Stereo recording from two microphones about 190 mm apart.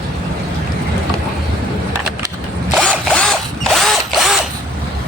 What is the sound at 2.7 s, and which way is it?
Zipper, 5° right (ahead or behind).